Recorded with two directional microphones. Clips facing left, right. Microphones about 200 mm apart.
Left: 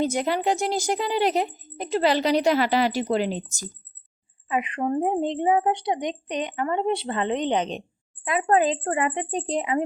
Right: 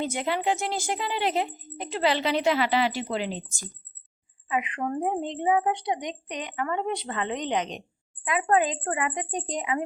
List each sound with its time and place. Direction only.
0.0 s a woman's voice: 40° left (ahead or behind)
4.4 s a woman's voice: 30° left (ahead or behind)